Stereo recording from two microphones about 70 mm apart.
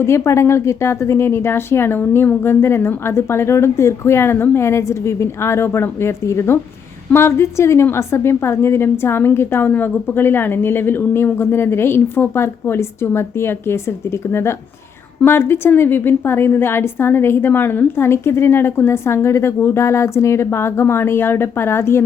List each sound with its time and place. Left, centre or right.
0.0 s a woman's voice: left